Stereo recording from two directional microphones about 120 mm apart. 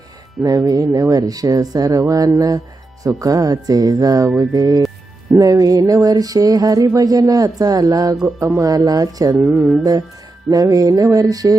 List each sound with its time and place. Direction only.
0.4 s speech: 30° right (ahead or behind)
5.3 s a sound: 30° right (ahead or behind)
8.4 s speech: 25° right (ahead or behind)
9.3 s music: 15° right (ahead or behind)
10.5 s speech: 30° right (ahead or behind)